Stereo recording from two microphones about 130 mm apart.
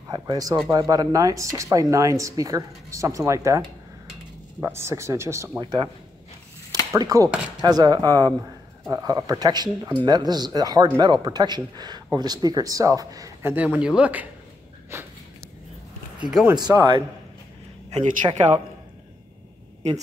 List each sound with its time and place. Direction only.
0.1 s speech: 25° right (ahead or behind)
5.6 s speech: 35° right (ahead or behind)
7.0 s speech: 25° right (ahead or behind); by 14.2 s 10° right (ahead or behind)
14.9 s a sound: 20° right (ahead or behind)
16.2 s speech: 5° right (ahead or behind)
16.5 s speech: 35° right (ahead or behind)
18.2 s speech: 35° right (ahead or behind)